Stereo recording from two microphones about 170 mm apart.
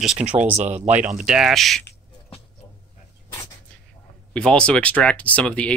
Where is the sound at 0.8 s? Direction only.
45° right (ahead or behind).